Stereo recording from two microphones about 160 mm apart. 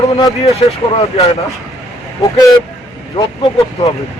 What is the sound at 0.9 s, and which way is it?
Speech, 45° left (ahead or behind).